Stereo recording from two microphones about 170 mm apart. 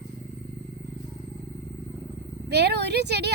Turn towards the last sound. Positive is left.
turn(degrees=-80)